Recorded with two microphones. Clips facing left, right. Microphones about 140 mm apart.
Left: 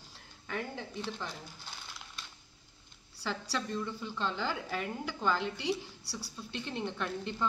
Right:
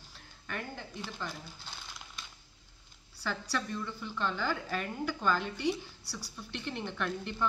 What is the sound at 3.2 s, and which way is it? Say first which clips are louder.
A woman's voice: right 1 dB; 25° left (ahead or behind).